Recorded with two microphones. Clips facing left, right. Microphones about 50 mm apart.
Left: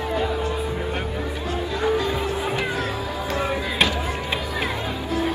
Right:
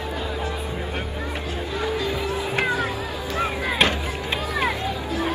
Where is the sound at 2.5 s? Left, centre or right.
Right.